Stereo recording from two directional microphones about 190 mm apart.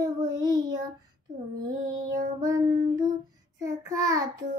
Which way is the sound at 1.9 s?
20° right (ahead or behind).